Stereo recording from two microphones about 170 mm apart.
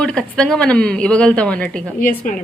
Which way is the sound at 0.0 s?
5° left (ahead or behind).